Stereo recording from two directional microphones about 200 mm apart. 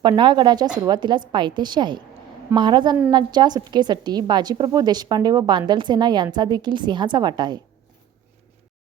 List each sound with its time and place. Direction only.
0.0 s a woman's voice: 20° right (ahead or behind)